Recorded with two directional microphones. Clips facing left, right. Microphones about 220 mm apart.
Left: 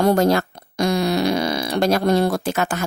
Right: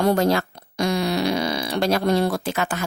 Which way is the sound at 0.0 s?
45° left (ahead or behind).